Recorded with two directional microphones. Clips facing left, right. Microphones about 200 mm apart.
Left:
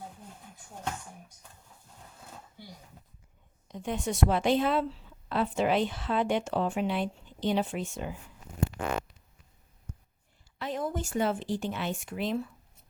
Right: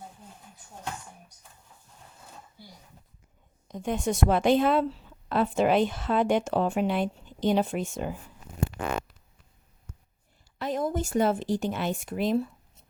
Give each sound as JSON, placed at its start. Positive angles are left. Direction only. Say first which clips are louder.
{"t": 3.7, "sound": "a woman's voice", "louder": "right 4 dB", "side_deg": -45}
{"t": 10.6, "sound": "speech", "louder": "right 4 dB", "side_deg": -40}